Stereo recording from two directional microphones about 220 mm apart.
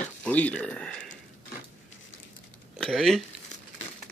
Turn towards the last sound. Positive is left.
turn(degrees=0)  # may be behind; listen again after turning